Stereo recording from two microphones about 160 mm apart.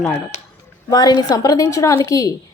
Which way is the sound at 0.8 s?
25° left (ahead or behind).